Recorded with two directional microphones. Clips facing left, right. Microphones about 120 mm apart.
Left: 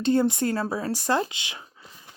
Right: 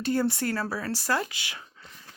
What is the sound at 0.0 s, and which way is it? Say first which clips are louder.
Speech: left 4 dB; 25° left (ahead or behind).